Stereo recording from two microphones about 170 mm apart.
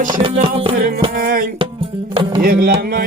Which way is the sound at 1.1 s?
55° right (ahead or behind).